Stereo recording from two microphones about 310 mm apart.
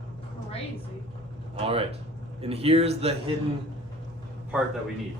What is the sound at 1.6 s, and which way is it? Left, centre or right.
A man's voice, centre.